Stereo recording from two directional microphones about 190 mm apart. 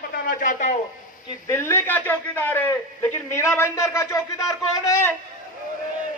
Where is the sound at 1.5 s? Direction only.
10° left (ahead or behind).